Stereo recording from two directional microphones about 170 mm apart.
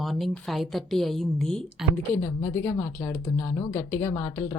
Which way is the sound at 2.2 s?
20° left (ahead or behind).